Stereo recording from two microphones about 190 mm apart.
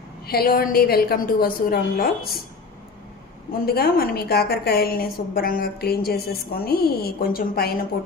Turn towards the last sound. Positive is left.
turn(degrees=50)  # may be behind; listen again after turning